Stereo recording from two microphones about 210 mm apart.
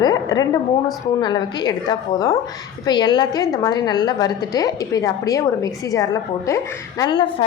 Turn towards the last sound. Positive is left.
turn(degrees=20)  # may be behind; listen again after turning